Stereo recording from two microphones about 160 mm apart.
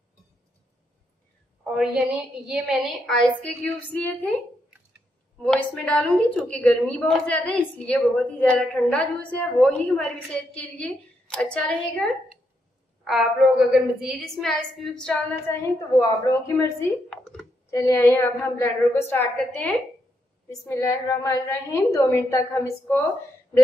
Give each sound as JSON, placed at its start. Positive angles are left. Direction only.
{"t": 2.4, "sound": "a woman's voice", "side_deg": 0}
{"t": 5.4, "sound": "a woman's voice", "side_deg": 5}
{"t": 15.5, "sound": "a woman's voice", "side_deg": 20}
{"t": 17.1, "sound": "a sound", "side_deg": 5}
{"t": 17.6, "sound": "a woman's voice", "side_deg": 15}